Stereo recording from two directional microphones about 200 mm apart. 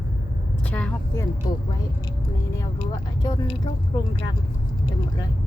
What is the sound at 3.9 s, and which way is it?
Speech, 20° left (ahead or behind).